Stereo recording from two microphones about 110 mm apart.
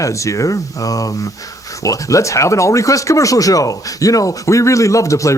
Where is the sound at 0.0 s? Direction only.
30° left (ahead or behind).